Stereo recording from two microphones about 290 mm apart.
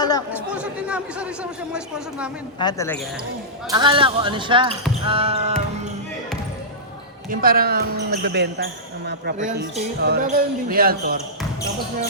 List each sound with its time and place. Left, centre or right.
0.5 s speech: centre
2.6 s speech: centre
3.7 s speech: centre
7.3 s speech: right